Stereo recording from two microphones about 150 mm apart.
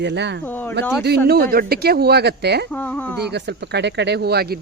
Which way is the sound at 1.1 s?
90° right.